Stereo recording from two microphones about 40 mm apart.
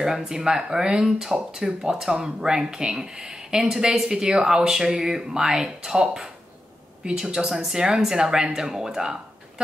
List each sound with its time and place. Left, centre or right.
0.0 s speech: centre
7.2 s speech: centre